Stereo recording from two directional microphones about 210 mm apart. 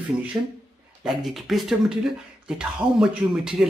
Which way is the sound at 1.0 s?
Centre (ahead or behind).